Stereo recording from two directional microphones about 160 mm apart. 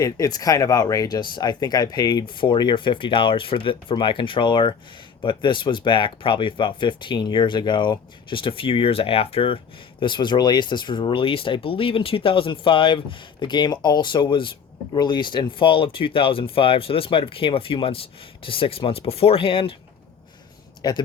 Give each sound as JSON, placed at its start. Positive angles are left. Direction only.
{"t": 0.0, "sound": "speech", "side_deg": 25}
{"t": 20.8, "sound": "speech", "side_deg": 25}